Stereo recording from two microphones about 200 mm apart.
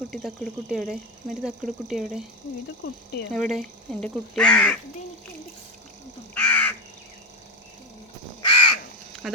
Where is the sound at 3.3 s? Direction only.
Centre (ahead or behind).